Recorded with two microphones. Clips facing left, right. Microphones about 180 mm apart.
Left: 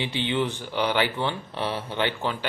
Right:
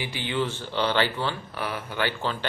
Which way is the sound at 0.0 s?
25° left (ahead or behind).